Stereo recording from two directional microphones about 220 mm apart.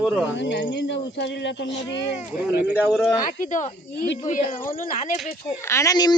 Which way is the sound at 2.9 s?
5° left (ahead or behind).